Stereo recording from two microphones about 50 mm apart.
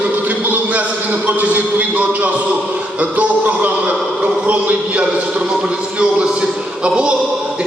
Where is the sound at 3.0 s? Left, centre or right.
Right.